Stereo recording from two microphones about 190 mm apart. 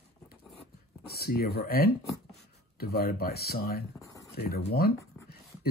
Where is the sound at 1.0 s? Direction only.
55° left (ahead or behind).